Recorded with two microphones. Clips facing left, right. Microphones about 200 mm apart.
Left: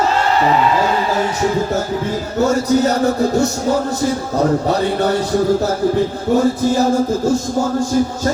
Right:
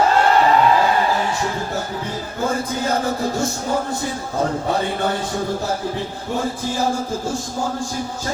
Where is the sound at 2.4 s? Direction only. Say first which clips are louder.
Left 7 dB; 40° left (ahead or behind).